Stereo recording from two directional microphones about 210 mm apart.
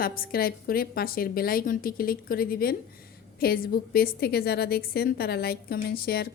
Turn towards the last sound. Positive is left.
turn(degrees=45)  # may be behind; listen again after turning